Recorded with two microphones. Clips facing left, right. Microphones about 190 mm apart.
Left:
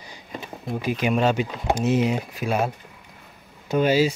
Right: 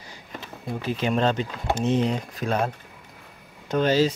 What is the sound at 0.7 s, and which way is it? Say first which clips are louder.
Speech: left 2 dB; 10° left (ahead or behind).